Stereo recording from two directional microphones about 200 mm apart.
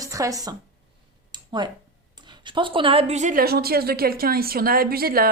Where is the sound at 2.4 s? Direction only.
25° right (ahead or behind).